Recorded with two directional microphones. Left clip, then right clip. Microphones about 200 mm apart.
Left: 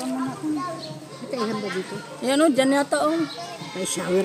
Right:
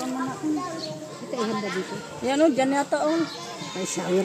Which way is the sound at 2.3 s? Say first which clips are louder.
Left 2 dB; 60° left (ahead or behind).